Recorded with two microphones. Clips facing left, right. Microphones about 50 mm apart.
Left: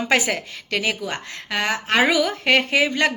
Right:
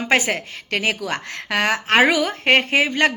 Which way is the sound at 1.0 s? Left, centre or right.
Right.